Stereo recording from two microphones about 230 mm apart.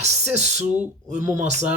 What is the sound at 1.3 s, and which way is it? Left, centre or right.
Speech, right.